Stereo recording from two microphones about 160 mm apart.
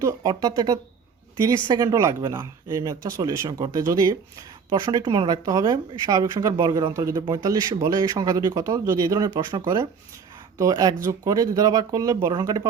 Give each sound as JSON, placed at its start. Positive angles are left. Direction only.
{"t": 0.0, "sound": "speech", "side_deg": -20}